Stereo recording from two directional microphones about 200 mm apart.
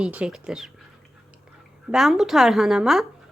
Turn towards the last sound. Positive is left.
turn(degrees=0)  # may be behind; listen again after turning